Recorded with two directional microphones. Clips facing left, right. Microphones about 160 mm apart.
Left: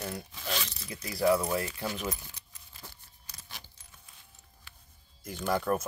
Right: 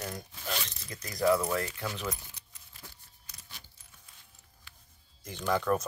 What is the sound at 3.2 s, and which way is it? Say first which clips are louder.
Keys jangling: left 4 dB; 90° left.